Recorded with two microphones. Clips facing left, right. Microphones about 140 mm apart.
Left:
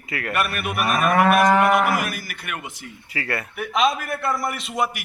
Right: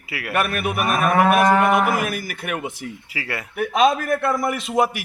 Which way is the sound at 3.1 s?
10° right (ahead or behind).